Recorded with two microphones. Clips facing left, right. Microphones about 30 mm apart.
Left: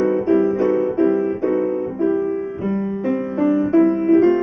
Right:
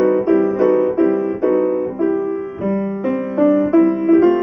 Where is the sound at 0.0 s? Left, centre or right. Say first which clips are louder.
Right 2 dB; centre.